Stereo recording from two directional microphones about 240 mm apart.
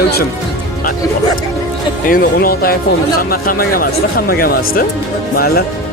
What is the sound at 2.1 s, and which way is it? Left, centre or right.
Speech, left.